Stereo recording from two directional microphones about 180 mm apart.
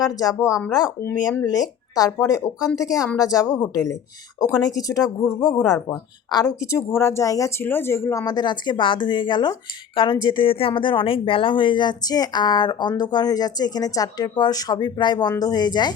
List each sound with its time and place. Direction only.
0.0 s speech: 20° left (ahead or behind)